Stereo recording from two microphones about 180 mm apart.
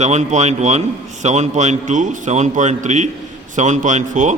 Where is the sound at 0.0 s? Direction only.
40° right (ahead or behind).